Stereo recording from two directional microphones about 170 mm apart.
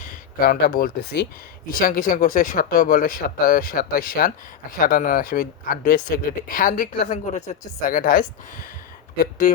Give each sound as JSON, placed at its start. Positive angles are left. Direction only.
{"t": 0.0, "sound": "speech", "side_deg": 55}